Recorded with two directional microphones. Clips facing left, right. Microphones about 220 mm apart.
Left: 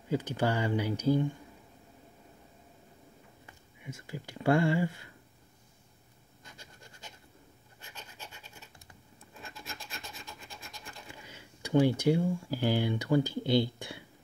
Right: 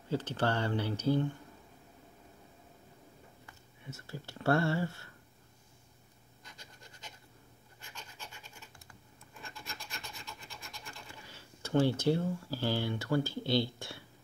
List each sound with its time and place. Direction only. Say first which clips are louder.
0.1 s speech: left 2 dB; 10° left (ahead or behind)
3.4 s speech: left 4 dB; 15° left (ahead or behind)
10.9 s speech: left 2 dB; 15° left (ahead or behind)